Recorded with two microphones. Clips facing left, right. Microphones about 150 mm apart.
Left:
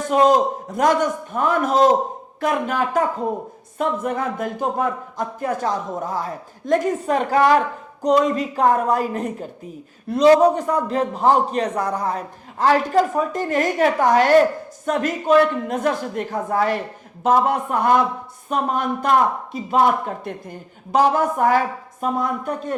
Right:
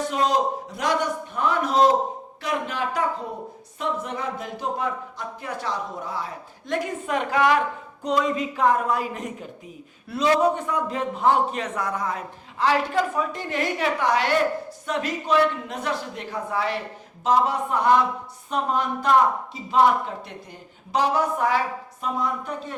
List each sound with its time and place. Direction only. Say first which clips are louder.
0.0 s a man's voice: left 7 dB; 50° left (ahead or behind)